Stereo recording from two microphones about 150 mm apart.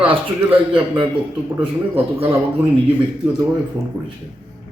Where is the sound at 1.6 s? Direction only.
40° right (ahead or behind).